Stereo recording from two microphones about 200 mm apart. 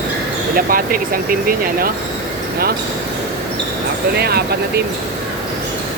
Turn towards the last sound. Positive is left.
turn(degrees=-50)  # may be behind; listen again after turning